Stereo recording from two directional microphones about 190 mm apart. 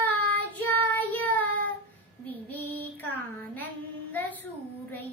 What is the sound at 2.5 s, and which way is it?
Child singing, 10° left (ahead or behind).